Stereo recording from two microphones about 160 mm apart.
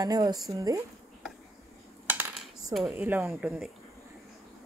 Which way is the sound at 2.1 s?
10° right (ahead or behind).